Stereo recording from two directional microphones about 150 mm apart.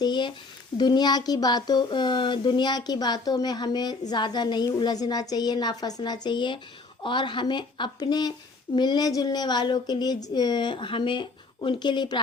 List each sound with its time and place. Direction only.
0.0 s speech: 30° left (ahead or behind)